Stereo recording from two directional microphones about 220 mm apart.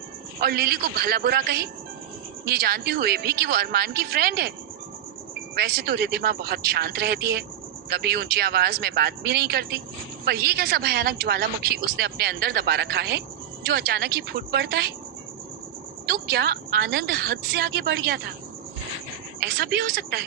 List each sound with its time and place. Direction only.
0.3 s a woman's voice: 45° right (ahead or behind)
5.5 s a woman's voice: 45° right (ahead or behind)
16.0 s a woman's voice: 45° right (ahead or behind)
19.4 s a woman's voice: 45° right (ahead or behind)